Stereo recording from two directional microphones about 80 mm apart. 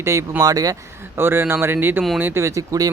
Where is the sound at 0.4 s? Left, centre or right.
Right.